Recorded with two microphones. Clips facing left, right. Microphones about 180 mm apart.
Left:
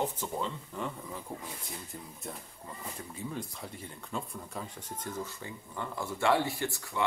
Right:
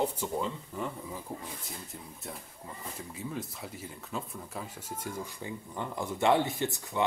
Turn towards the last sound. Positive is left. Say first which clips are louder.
# right 3 dB
turn(degrees=-20)  # may be behind; listen again after turning